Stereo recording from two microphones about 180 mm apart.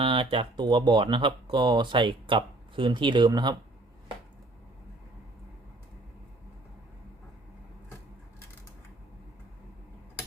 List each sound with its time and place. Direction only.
0.0 s speech: 30° right (ahead or behind)